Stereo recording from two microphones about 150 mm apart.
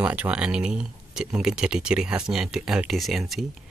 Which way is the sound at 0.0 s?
10° right (ahead or behind).